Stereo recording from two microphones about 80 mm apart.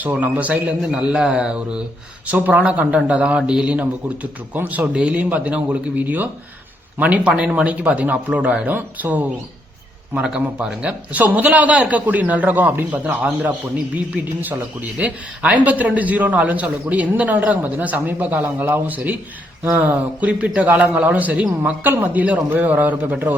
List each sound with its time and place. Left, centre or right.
0.1 s a man's voice: centre